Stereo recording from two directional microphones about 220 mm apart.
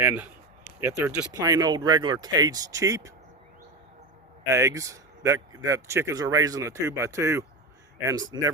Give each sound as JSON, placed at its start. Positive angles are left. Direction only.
{"t": 0.0, "sound": "speech", "side_deg": -10}
{"t": 4.4, "sound": "speech", "side_deg": -15}